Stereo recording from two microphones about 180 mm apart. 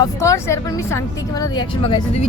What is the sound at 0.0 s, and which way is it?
A woman's voice, 15° left (ahead or behind).